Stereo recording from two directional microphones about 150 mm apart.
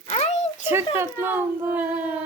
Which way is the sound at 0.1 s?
45° left (ahead or behind).